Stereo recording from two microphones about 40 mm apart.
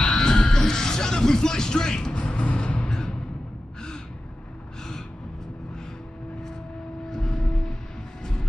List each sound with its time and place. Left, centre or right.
0.0 s music: centre
2.1 s music: left
7.1 s vehicle: centre